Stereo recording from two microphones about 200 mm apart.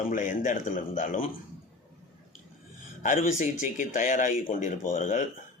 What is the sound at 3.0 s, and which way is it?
Speech, 40° left (ahead or behind).